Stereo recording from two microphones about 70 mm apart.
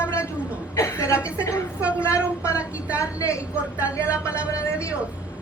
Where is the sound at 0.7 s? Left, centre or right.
Left.